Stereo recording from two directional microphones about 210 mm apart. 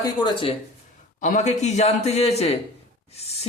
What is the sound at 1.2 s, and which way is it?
A man's voice, 35° left (ahead or behind).